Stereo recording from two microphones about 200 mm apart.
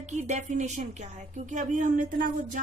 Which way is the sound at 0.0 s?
35° right (ahead or behind).